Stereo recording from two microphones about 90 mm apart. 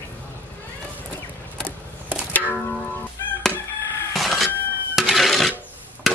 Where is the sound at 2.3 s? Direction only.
15° left (ahead or behind).